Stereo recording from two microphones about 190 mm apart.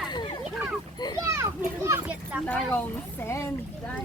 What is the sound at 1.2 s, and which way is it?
Children playing, 15° right (ahead or behind).